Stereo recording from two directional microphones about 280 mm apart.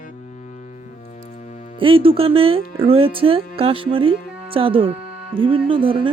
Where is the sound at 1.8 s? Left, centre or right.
Centre.